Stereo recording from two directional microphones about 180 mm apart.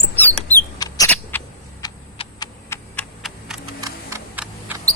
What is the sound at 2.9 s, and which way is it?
Computer keyboard, centre (ahead or behind).